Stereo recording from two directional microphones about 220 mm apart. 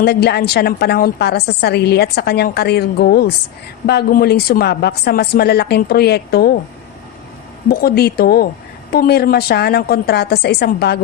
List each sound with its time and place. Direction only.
0.0 s a woman's voice: 50° left (ahead or behind)
7.7 s a woman's voice: 45° left (ahead or behind)